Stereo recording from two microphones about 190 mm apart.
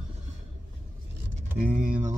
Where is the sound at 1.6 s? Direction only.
45° right (ahead or behind).